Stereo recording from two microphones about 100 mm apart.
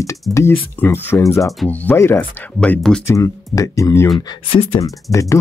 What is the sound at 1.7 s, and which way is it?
Speech, 15° left (ahead or behind).